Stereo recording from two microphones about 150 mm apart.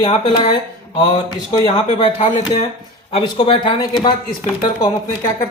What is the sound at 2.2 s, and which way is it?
Speech, 40° left (ahead or behind).